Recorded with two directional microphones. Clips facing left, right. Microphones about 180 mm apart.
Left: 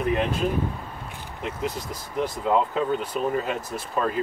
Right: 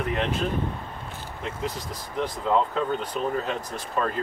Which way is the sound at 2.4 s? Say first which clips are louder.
Left 1 dB; 5° left (ahead or behind).